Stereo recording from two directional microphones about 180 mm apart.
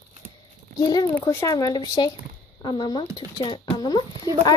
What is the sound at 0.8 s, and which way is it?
A woman's voice, 20° left (ahead or behind).